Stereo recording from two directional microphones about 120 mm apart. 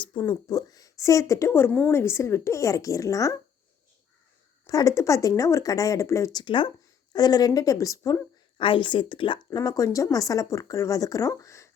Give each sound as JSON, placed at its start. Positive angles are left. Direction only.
{"t": 0.0, "sound": "speech", "side_deg": 40}
{"t": 4.6, "sound": "speech", "side_deg": 30}
{"t": 6.4, "sound": "a woman's voice", "side_deg": 45}
{"t": 8.5, "sound": "speech", "side_deg": 45}
{"t": 9.6, "sound": "speech", "side_deg": 30}